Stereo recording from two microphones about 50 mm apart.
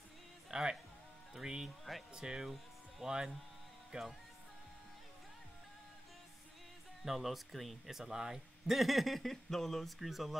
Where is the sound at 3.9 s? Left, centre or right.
Right.